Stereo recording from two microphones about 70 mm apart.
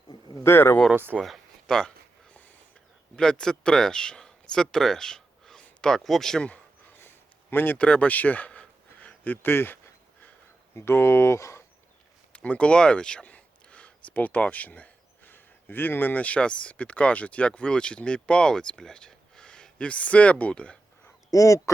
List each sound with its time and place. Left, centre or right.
0.4 s speech: left
1.2 s a sound: centre
3.2 s speech: centre
6.9 s a sound: left
7.8 s speech: centre
10.8 s speech: left
12.3 s speech: centre
21.2 s speech: left